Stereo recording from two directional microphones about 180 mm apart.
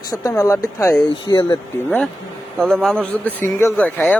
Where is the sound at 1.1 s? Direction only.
30° left (ahead or behind).